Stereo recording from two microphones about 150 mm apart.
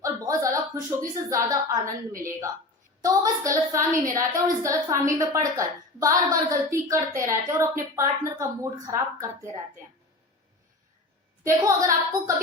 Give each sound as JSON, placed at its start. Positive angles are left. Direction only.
{"t": 0.0, "sound": "a woman's voice", "side_deg": -20}
{"t": 11.4, "sound": "a woman's voice", "side_deg": -20}